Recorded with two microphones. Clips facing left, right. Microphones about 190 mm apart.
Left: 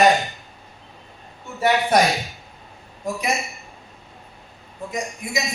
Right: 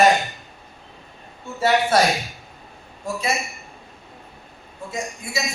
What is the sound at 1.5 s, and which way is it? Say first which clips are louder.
Speech: even; 15° left (ahead or behind).